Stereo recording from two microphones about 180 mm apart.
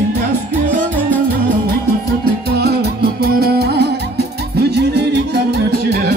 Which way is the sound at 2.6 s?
65° right (ahead or behind).